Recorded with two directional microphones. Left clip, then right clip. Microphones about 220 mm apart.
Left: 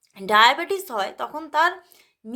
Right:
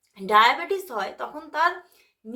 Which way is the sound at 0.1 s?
45° left (ahead or behind).